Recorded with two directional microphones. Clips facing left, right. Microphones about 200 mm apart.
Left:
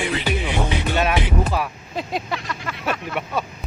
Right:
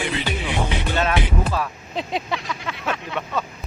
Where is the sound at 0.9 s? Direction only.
15° left (ahead or behind).